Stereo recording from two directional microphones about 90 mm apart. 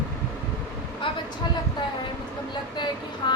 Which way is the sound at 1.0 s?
70° left (ahead or behind).